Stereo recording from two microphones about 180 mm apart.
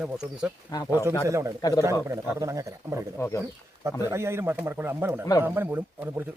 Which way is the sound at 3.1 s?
15° left (ahead or behind).